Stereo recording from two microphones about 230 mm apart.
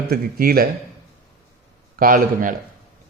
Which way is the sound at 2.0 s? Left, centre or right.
Right.